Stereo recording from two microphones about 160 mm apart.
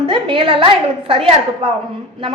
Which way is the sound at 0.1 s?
30° right (ahead or behind).